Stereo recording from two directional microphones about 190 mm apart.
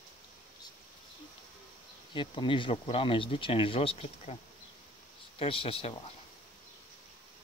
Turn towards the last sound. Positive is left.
turn(degrees=30)  # may be behind; listen again after turning